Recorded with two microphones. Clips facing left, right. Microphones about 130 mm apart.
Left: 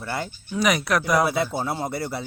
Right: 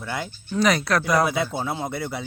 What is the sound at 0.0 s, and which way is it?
A man's voice, 5° left (ahead or behind).